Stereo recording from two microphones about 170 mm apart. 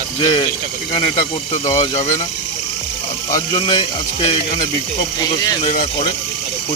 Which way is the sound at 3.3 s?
30° left (ahead or behind).